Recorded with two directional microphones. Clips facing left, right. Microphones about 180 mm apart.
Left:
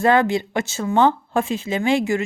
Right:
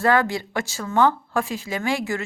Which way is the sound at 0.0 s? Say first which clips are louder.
Left 3 dB; 20° left (ahead or behind).